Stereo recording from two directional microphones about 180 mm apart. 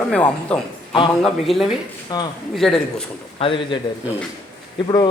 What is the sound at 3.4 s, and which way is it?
Speech, 30° left (ahead or behind).